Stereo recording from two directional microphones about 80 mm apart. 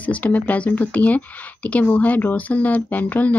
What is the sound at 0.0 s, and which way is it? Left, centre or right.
Speech, centre.